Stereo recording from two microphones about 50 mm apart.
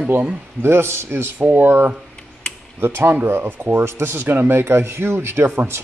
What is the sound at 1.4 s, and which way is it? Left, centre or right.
Speech, right.